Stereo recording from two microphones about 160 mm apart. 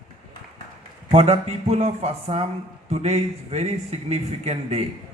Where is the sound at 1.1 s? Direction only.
40° right (ahead or behind).